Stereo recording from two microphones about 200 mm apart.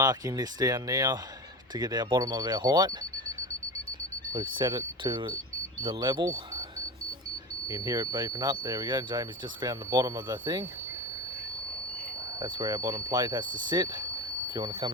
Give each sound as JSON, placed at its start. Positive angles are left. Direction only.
{"t": 0.0, "sound": "speech", "side_deg": -20}
{"t": 4.3, "sound": "speech", "side_deg": -20}
{"t": 7.7, "sound": "speech", "side_deg": -20}
{"t": 12.4, "sound": "speech", "side_deg": -20}